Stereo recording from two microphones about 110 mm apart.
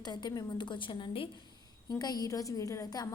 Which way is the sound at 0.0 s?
40° left (ahead or behind).